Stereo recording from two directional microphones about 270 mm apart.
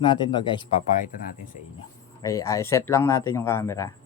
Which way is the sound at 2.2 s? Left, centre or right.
Centre.